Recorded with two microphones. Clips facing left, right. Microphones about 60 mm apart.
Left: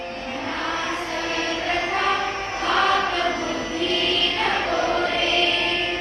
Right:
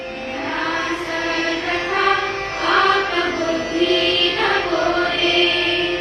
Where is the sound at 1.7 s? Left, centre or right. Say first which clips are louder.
Right 4 dB; right.